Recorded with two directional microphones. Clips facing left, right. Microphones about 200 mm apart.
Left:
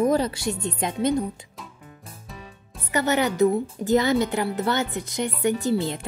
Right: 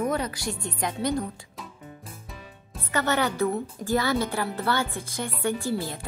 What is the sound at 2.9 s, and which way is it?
A woman's voice, 15° left (ahead or behind).